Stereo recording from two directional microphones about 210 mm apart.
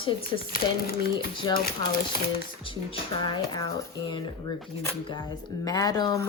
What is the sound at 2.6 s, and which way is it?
Speech, 25° left (ahead or behind).